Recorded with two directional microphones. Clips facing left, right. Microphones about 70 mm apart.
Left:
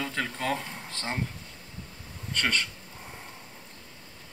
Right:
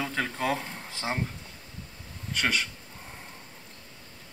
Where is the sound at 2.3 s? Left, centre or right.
Centre.